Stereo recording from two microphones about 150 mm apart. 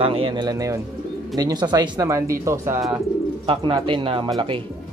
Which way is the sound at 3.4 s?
35° right (ahead or behind).